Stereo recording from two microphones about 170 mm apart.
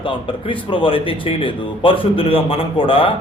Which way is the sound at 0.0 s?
30° left (ahead or behind).